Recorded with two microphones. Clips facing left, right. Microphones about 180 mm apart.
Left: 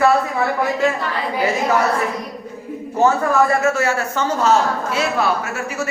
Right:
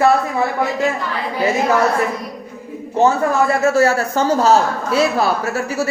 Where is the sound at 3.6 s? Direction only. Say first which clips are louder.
Right 4 dB; 35° right (ahead or behind).